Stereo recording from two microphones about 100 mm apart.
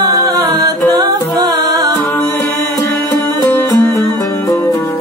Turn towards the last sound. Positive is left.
turn(degrees=20)  # may be behind; listen again after turning